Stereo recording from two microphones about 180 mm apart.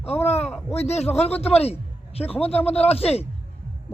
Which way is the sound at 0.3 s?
35° left (ahead or behind).